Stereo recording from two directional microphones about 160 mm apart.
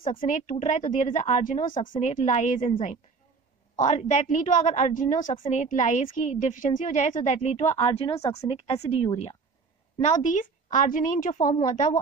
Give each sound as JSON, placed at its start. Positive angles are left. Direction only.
{"t": 0.0, "sound": "speech", "side_deg": 35}
{"t": 0.3, "sound": "a woman's voice", "side_deg": 50}
{"t": 3.7, "sound": "a woman's voice", "side_deg": 50}
{"t": 10.0, "sound": "a woman's voice", "side_deg": 55}